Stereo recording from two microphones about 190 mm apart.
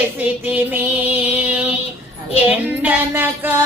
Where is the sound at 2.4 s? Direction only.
10° right (ahead or behind).